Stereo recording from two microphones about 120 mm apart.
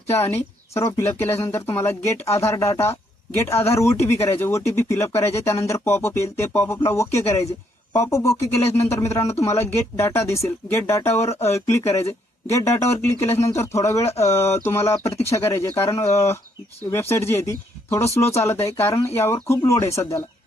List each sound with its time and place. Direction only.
0.1 s speech: 20° left (ahead or behind)